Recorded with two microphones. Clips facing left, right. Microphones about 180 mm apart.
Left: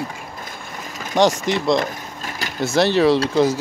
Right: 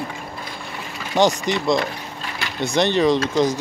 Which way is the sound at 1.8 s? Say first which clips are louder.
Left 1 dB; 45° left (ahead or behind).